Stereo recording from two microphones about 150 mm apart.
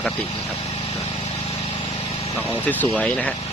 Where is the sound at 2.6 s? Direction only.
10° left (ahead or behind).